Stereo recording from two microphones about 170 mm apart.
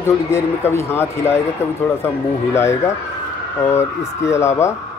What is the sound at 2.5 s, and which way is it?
Speech, 15° left (ahead or behind).